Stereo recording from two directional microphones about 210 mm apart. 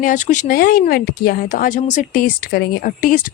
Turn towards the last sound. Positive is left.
turn(degrees=40)  # may be behind; listen again after turning